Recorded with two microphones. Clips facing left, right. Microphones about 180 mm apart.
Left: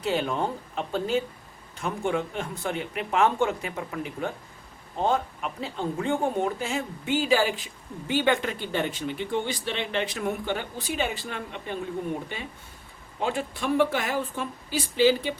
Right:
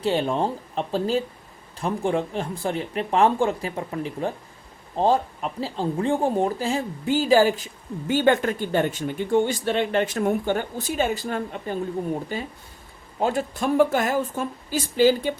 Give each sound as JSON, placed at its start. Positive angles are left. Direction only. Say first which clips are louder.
{"t": 0.0, "sound": "speech", "louder": "right 4 dB", "side_deg": -30}